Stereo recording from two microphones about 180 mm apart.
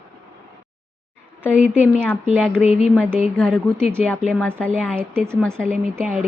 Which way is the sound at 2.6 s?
35° left (ahead or behind).